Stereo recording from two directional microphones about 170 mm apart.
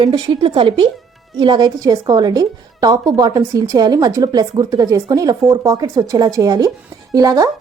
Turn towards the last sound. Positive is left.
turn(degrees=-20)  # may be behind; listen again after turning